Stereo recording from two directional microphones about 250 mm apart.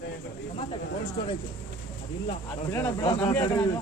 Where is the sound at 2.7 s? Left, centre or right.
Centre.